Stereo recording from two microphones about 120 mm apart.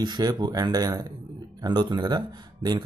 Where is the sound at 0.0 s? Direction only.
35° right (ahead or behind).